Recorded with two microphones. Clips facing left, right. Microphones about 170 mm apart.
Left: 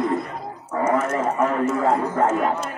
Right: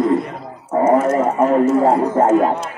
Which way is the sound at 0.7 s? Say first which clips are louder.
Right 7 dB; 30° right (ahead or behind).